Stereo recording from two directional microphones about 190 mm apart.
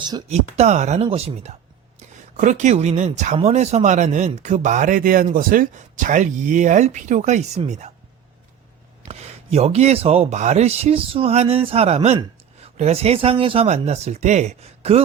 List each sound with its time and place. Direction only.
0.3 s speech: 35° right (ahead or behind)
9.0 s speech: 35° right (ahead or behind)